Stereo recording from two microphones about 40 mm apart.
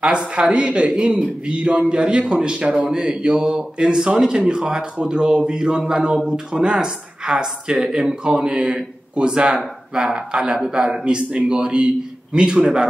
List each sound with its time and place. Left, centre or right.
0.1 s a man's voice: right